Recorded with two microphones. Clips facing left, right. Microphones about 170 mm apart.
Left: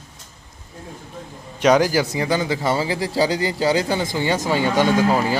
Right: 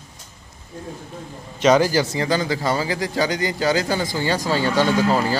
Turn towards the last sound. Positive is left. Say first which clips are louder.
# left 1 dB
turn(degrees=15)  # may be behind; listen again after turning